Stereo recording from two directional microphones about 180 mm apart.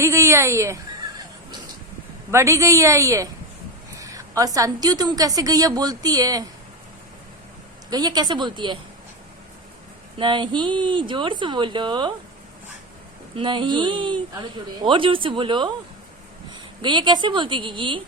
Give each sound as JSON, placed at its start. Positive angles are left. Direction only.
{"t": 0.0, "sound": "a woman's voice", "side_deg": -15}
{"t": 2.3, "sound": "a woman's voice", "side_deg": -15}
{"t": 7.9, "sound": "a woman's voice", "side_deg": -20}
{"t": 10.2, "sound": "a woman's voice", "side_deg": -25}
{"t": 13.3, "sound": "a woman's voice", "side_deg": -25}